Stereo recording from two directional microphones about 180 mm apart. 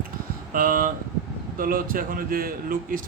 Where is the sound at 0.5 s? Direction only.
50° right (ahead or behind).